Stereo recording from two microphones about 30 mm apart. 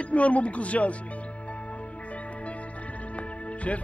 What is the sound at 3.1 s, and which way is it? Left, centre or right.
Music, left.